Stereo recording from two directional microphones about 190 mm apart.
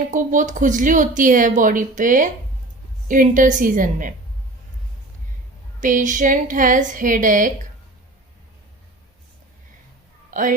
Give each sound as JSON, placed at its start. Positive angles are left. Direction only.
{"t": 0.1, "sound": "speech", "side_deg": -40}
{"t": 5.8, "sound": "speech", "side_deg": -40}
{"t": 10.3, "sound": "a woman's voice", "side_deg": -45}